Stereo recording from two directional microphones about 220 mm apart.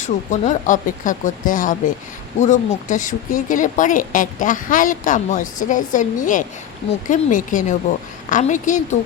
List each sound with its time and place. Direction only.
0.0 s speech: 35° left (ahead or behind)